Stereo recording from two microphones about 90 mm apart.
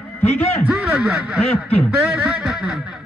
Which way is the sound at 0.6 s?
10° right (ahead or behind).